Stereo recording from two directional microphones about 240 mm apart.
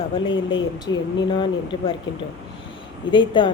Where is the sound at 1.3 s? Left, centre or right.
Left.